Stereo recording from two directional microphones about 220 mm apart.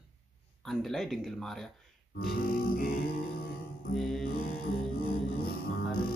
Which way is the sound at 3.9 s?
Centre (ahead or behind).